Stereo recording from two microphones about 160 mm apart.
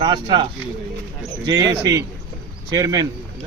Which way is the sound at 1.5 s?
20° right (ahead or behind).